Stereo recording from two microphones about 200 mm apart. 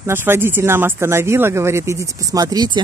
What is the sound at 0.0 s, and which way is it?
Speech, 10° right (ahead or behind).